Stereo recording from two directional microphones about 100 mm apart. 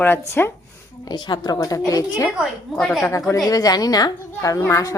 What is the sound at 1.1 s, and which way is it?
A woman's voice, 50° left (ahead or behind).